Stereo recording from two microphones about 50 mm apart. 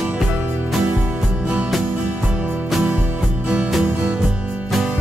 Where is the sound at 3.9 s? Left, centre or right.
Right.